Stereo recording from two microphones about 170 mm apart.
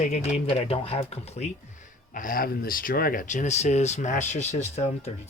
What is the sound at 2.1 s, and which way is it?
Speech, 55° left (ahead or behind).